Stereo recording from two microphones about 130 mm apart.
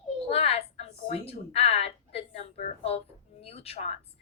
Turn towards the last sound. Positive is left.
turn(degrees=55)  # may be behind; listen again after turning